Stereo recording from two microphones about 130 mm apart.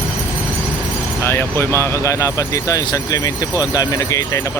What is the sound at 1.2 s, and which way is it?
Speech, 20° left (ahead or behind).